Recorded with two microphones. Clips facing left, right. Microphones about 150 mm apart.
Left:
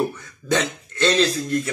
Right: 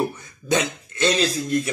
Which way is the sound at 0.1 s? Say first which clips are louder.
Even; 20° right (ahead or behind).